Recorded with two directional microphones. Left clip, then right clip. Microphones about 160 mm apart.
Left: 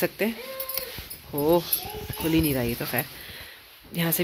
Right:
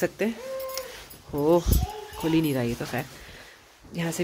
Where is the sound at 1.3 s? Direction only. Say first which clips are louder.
Even; 25° right (ahead or behind); by 4.2 s centre (ahead or behind).